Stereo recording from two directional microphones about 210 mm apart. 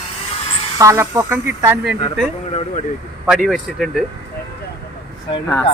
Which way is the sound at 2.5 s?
25° left (ahead or behind).